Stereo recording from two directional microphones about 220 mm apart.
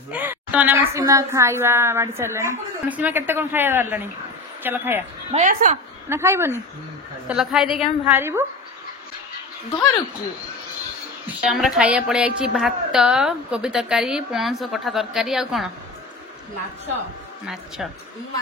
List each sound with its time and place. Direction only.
0.1 s a woman's voice: 10° right (ahead or behind)
5.3 s a woman's voice: 35° right (ahead or behind)
6.0 s a woman's voice: 10° right (ahead or behind)
11.4 s a woman's voice: centre (ahead or behind)